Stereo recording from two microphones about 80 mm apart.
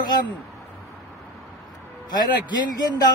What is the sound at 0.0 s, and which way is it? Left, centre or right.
Speech, left.